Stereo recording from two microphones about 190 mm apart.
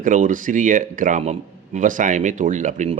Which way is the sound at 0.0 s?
45° right (ahead or behind).